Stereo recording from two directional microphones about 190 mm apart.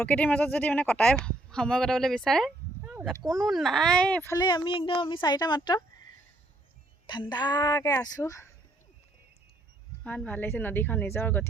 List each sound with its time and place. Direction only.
0.0 s a woman's voice: 10° left (ahead or behind); by 5.8 s 25° left (ahead or behind)
7.1 s a child's voice: 25° left (ahead or behind)
10.0 s a woman's voice: 5° left (ahead or behind)